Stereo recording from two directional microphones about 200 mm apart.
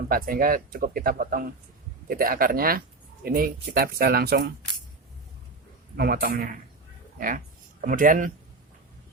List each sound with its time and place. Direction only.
0.1 s speech: 45° right (ahead or behind)
6.0 s speech: 50° right (ahead or behind)